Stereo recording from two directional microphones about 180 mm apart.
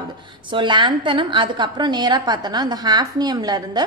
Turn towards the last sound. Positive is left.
turn(degrees=-20)  # may be behind; listen again after turning